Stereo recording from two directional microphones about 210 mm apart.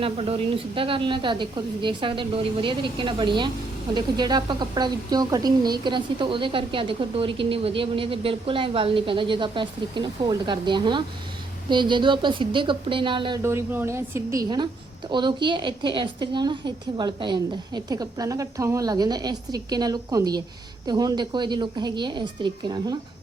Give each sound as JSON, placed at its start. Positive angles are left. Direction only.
{"t": 0.0, "sound": "speech", "side_deg": -25}
{"t": 13.4, "sound": "a woman's voice", "side_deg": -10}